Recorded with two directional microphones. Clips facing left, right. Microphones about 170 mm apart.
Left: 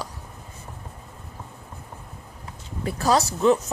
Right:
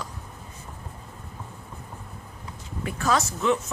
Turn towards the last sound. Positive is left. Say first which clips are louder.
# left 5 dB
turn(degrees=35)  # may be behind; listen again after turning